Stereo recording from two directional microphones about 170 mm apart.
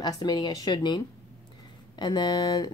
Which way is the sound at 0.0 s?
25° left (ahead or behind).